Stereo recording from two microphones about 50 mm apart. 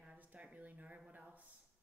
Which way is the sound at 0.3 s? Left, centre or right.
Right.